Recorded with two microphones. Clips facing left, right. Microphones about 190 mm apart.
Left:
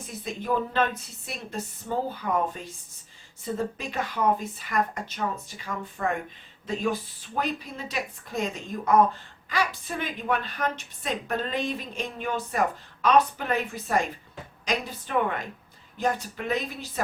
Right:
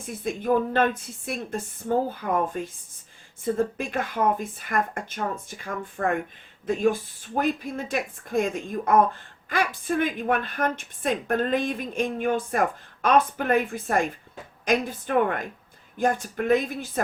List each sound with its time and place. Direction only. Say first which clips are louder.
0.3 s a woman's voice: right 5 dB; 50° right (ahead or behind)
7.3 s a woman's voice: right 5 dB; 50° right (ahead or behind)